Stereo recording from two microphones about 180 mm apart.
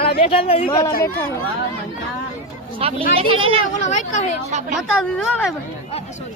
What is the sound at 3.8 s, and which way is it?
Speech, 40° left (ahead or behind).